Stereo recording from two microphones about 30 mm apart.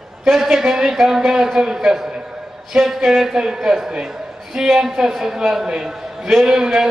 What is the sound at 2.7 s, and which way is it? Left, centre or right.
Speech, centre.